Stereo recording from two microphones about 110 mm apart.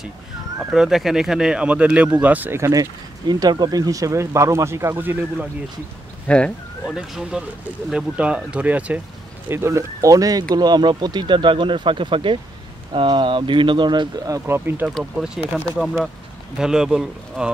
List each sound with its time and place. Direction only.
0.6 s speech: 5° right (ahead or behind)
2.6 s speech: 35° right (ahead or behind); by 5.5 s 15° right (ahead or behind)
6.2 s speech: 10° left (ahead or behind)
6.9 s speech: 5° right (ahead or behind)
9.5 s speech: 25° right (ahead or behind)
14.4 s speech: 20° right (ahead or behind)
15.2 s speech: 5° right (ahead or behind)